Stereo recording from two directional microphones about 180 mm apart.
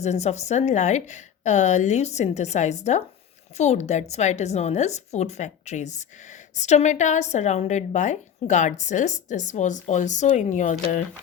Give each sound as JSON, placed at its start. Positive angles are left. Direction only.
{"t": 0.0, "sound": "a woman's voice", "side_deg": 40}